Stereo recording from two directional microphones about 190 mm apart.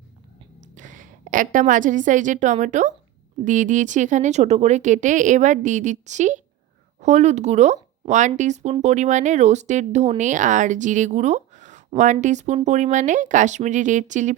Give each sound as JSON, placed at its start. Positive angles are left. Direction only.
{"t": 0.6, "sound": "a woman's voice", "side_deg": -40}